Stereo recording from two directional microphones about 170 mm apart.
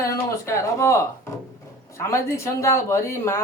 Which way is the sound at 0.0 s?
15° left (ahead or behind).